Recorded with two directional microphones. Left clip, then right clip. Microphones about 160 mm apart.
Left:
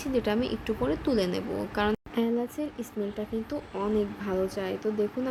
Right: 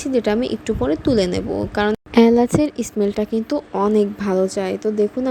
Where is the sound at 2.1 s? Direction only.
60° right (ahead or behind).